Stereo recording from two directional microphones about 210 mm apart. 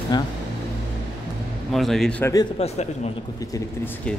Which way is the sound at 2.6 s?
30° left (ahead or behind).